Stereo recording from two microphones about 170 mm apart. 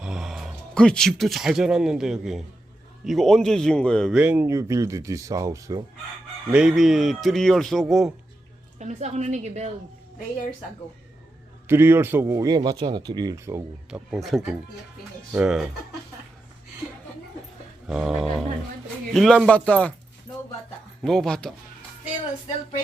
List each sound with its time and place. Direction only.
0.0 s speech: 5° right (ahead or behind)
4.2 s speech: 10° right (ahead or behind)
6.5 s speech: 5° right (ahead or behind)
8.8 s a woman's voice: 45° right (ahead or behind)
11.7 s speech: 15° right (ahead or behind)
13.9 s speech: centre (ahead or behind)
17.8 s speech: centre (ahead or behind)
21.0 s speech: 5° left (ahead or behind)